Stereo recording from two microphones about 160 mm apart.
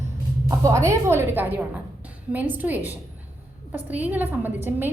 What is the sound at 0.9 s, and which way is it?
A woman's voice, 15° right (ahead or behind).